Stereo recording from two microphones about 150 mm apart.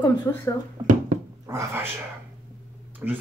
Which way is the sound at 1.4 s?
15° right (ahead or behind).